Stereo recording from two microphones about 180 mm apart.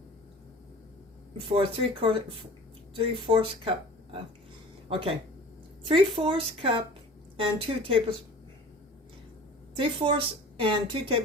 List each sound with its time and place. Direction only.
1.5 s a woman's voice: 30° right (ahead or behind)
5.9 s a woman's voice: 30° right (ahead or behind)
9.7 s a woman's voice: 30° right (ahead or behind)